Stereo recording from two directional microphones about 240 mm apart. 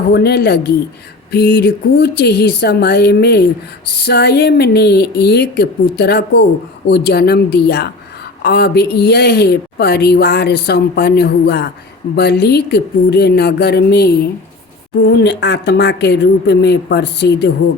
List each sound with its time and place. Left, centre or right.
0.1 s a woman's voice: left